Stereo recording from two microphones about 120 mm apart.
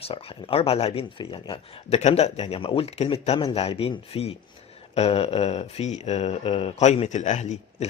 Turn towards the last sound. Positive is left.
turn(degrees=75)  # may be behind; listen again after turning